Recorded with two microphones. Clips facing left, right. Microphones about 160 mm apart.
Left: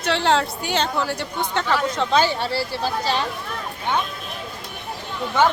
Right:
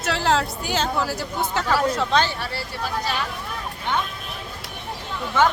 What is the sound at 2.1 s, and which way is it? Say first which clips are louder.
Speech: left 6 dB; 10° left (ahead or behind).